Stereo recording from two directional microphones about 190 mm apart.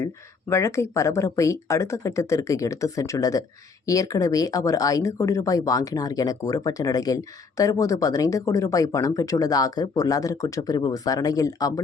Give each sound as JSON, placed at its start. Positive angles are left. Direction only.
{"t": 0.0, "sound": "speech", "side_deg": 15}